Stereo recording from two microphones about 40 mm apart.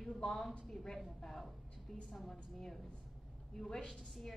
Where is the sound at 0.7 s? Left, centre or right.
Centre.